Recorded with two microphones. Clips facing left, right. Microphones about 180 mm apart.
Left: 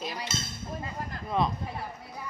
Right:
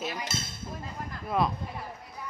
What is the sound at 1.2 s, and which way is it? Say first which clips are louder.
Speech: right 1 dB; 5° right (ahead or behind).